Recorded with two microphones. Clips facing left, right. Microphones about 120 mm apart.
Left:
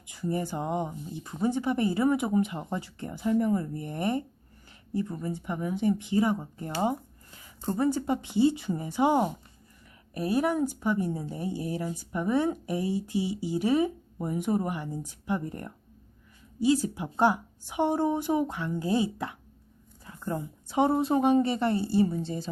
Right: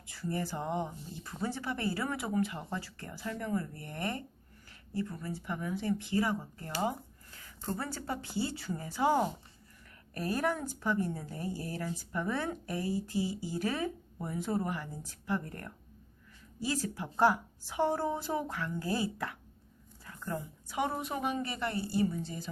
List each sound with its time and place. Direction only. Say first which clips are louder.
0.1 s speech: left 5 dB; 15° left (ahead or behind)